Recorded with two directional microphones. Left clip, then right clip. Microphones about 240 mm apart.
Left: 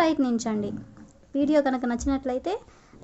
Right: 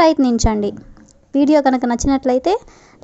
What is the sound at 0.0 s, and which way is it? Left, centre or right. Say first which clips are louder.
A woman's voice: right 10 dB; right.